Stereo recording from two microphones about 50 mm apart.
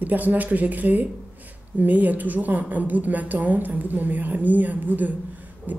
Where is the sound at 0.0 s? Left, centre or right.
Right.